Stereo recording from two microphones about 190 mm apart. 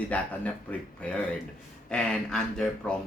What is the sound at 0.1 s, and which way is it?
Speech, 5° left (ahead or behind).